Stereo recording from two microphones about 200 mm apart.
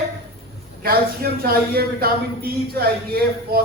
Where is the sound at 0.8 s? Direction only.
50° right (ahead or behind).